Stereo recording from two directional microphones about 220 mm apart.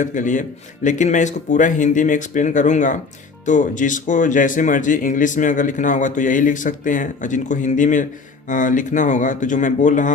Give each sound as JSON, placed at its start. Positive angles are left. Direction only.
{"t": 0.0, "sound": "speech", "side_deg": 35}